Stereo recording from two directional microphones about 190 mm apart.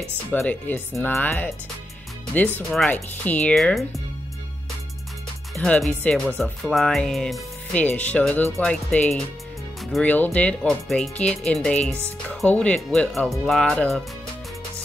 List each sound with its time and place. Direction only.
0.3 s speech: 10° left (ahead or behind)
5.5 s speech: centre (ahead or behind)